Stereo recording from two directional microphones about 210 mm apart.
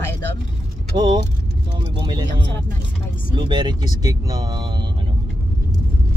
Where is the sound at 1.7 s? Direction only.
20° right (ahead or behind).